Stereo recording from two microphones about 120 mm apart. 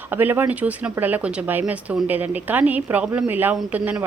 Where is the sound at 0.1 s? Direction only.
15° right (ahead or behind).